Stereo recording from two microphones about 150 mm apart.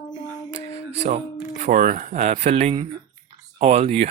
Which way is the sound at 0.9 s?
45° right (ahead or behind).